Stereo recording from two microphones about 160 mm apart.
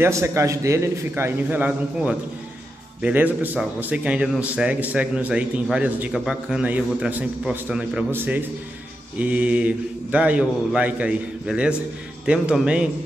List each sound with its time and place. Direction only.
0.0 s a man's voice: 15° right (ahead or behind)